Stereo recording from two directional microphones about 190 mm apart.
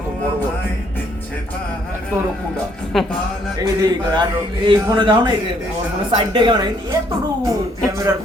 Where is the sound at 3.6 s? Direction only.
20° right (ahead or behind).